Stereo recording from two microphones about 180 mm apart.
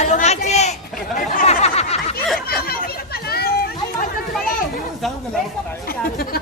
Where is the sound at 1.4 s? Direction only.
35° left (ahead or behind).